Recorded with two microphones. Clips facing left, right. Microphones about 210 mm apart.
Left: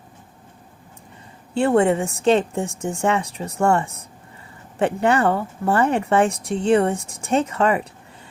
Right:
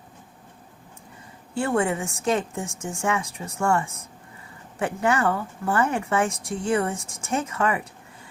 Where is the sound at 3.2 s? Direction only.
65° left (ahead or behind).